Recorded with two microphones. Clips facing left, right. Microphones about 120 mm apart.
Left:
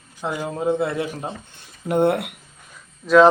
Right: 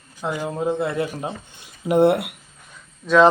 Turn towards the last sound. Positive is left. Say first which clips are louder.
# left 2 dB
turn(degrees=5)  # may be behind; listen again after turning